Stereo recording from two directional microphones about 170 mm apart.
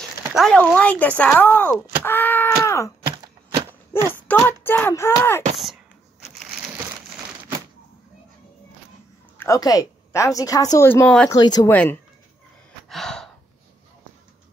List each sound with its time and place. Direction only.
0.3 s speech: centre (ahead or behind)
3.9 s speech: 15° left (ahead or behind)
9.4 s a woman's voice: 20° left (ahead or behind)
11.2 s a woman's voice: 25° left (ahead or behind)
11.7 s speech: 10° left (ahead or behind)
12.9 s gasp: 5° left (ahead or behind)